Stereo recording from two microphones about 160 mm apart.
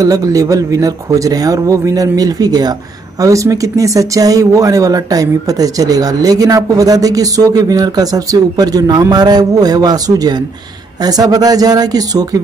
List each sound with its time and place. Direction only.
0.0 s speech: 20° right (ahead or behind)